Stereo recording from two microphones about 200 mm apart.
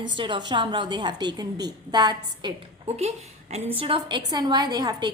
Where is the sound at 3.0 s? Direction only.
30° right (ahead or behind).